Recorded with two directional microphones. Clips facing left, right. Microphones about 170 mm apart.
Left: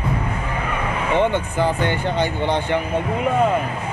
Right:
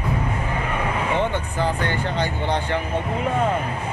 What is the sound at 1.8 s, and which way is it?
Speech, 20° left (ahead or behind).